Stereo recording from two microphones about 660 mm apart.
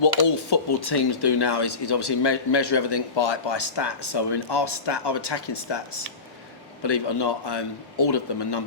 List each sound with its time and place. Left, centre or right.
0.1 s speech: left